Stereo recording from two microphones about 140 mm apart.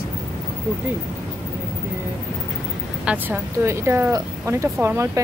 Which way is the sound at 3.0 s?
10° right (ahead or behind).